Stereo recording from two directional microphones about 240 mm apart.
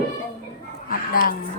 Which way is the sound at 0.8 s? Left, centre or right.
Left.